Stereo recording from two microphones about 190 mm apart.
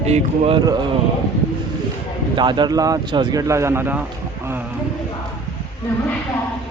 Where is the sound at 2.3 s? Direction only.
25° right (ahead or behind).